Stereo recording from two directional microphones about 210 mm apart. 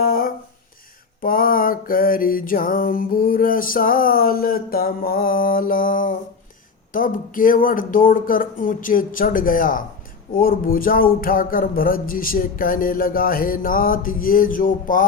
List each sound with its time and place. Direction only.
0.0 s a sound: 45° left (ahead or behind)
1.2 s music: 45° left (ahead or behind)
6.9 s speech: 40° left (ahead or behind)
10.3 s music: 45° left (ahead or behind)